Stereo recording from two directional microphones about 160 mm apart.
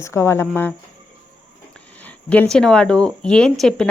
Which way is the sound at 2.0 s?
10° left (ahead or behind).